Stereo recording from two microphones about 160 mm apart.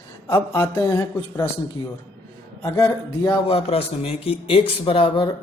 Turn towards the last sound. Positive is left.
turn(degrees=35)  # may be behind; listen again after turning